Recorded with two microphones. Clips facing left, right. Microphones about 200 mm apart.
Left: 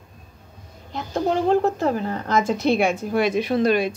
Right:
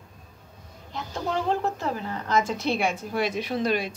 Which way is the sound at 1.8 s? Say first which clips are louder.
Left 7 dB; 50° left (ahead or behind).